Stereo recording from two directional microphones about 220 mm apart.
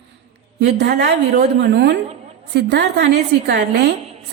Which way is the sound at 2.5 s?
50° right (ahead or behind).